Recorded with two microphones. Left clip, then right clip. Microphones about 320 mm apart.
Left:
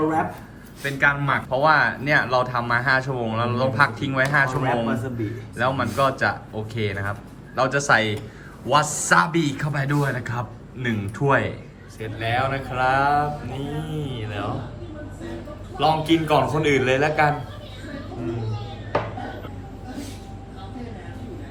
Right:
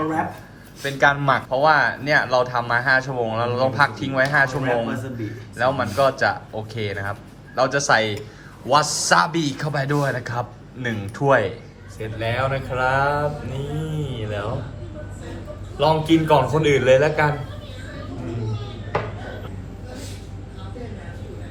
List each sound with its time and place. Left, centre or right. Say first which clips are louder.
0.8 s speech: right 2 dB; centre
15.8 s speech: right 2 dB; centre